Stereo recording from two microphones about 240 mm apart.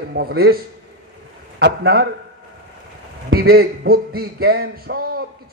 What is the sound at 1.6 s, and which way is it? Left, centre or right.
Speech, right.